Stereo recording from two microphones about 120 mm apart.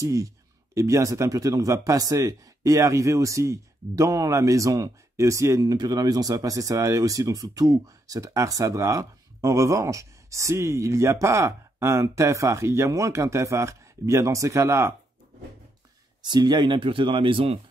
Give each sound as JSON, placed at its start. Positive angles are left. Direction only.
{"t": 0.0, "sound": "speech", "side_deg": -25}
{"t": 16.2, "sound": "speech", "side_deg": -35}